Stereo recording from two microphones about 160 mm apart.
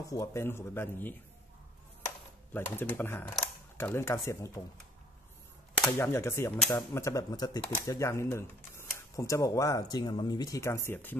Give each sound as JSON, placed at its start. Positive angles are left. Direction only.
{"t": 0.0, "sound": "speech", "side_deg": 20}
{"t": 5.8, "sound": "speech", "side_deg": 15}